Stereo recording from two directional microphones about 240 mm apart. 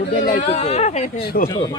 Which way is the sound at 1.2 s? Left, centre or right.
Left.